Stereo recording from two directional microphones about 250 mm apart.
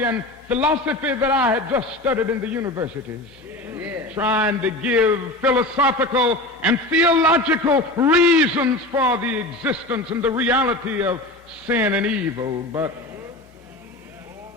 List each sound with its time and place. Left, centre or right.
0.0 s a man's voice: centre